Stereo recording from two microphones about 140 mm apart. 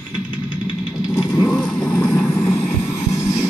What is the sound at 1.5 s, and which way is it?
Vehicle, 5° left (ahead or behind).